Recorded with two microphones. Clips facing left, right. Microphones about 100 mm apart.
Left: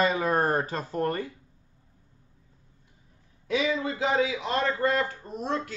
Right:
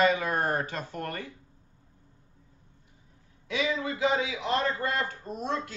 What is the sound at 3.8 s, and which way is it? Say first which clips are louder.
Speech: left 2 dB; 35° left (ahead or behind).